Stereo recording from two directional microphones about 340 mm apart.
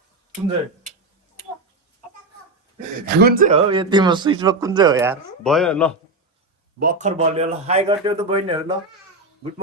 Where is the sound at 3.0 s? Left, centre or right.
Right; by 5.9 s centre.